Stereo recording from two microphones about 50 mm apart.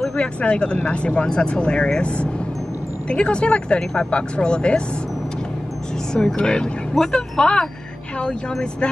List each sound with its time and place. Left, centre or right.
0.2 s speech: left
6.1 s speech: centre